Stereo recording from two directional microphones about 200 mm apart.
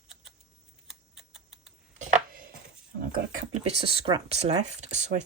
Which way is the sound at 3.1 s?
40° right (ahead or behind).